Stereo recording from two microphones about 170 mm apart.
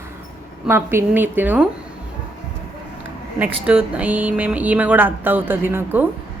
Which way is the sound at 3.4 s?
5° right (ahead or behind).